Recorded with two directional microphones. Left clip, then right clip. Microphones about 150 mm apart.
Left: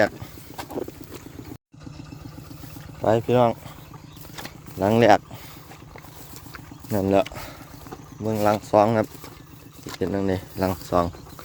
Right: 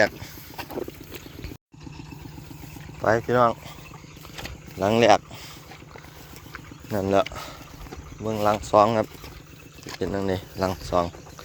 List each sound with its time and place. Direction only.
0.5 s boat: centre (ahead or behind)
3.2 s speech: 45° left (ahead or behind)
4.8 s speech: 40° left (ahead or behind)
6.9 s speech: 35° left (ahead or behind)
8.2 s speech: 45° left (ahead or behind); by 10.8 s 30° left (ahead or behind)
10.8 s speech: 50° left (ahead or behind)